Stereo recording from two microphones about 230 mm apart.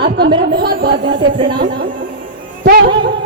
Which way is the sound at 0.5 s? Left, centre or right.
Right.